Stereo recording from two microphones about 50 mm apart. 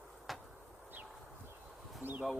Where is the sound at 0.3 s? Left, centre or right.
Centre.